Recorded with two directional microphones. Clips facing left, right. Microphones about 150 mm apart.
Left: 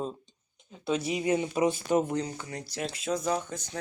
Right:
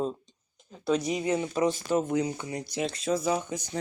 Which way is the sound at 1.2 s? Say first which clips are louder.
Even; 15° left (ahead or behind).